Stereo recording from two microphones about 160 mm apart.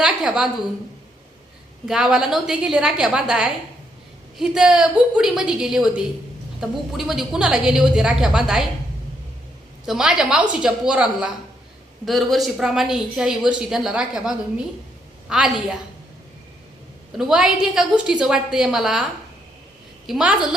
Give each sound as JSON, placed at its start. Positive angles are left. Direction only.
{"t": 0.0, "sound": "a sound", "side_deg": -5}
{"t": 1.9, "sound": "speech", "side_deg": -5}
{"t": 9.8, "sound": "speech", "side_deg": -5}
{"t": 17.2, "sound": "speech", "side_deg": -5}
{"t": 20.1, "sound": "speech", "side_deg": -5}